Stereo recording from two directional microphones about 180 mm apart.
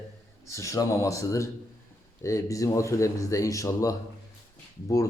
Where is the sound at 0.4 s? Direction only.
15° left (ahead or behind).